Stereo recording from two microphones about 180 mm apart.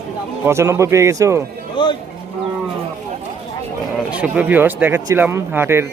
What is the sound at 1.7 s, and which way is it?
Speech, 25° left (ahead or behind).